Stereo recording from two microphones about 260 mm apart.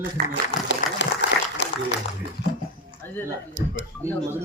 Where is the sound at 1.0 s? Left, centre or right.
Left.